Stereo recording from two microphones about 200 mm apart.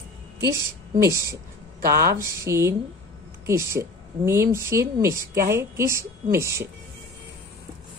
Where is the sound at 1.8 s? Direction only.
50° right (ahead or behind).